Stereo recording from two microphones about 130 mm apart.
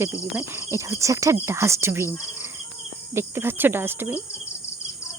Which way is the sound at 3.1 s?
20° right (ahead or behind).